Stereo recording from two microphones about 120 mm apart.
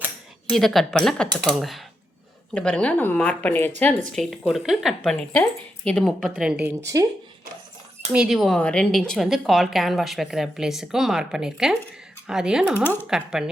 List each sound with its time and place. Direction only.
0.5 s speech: centre (ahead or behind)
4.1 s speech: centre (ahead or behind)
5.3 s speech: 10° left (ahead or behind); by 6.7 s 10° right (ahead or behind)
8.1 s speech: 5° right (ahead or behind)
8.5 s speech: 10° left (ahead or behind)
12.7 s speech: 15° left (ahead or behind)
13.1 s speech: 5° right (ahead or behind)